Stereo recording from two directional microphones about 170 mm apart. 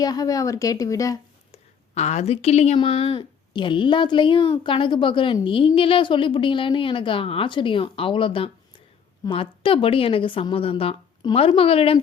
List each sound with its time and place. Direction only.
0.0 s a woman's voice: 20° left (ahead or behind)
2.0 s a woman's voice: 40° left (ahead or behind)